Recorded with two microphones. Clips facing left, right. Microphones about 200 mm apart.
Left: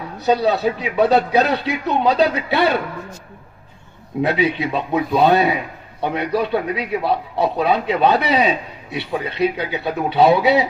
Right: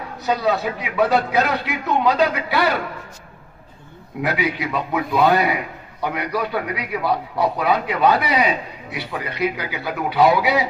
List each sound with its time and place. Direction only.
0.3 s a man's voice: 30° left (ahead or behind)
4.2 s a man's voice: 25° left (ahead or behind)